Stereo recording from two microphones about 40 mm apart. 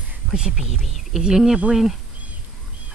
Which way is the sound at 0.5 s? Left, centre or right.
Centre.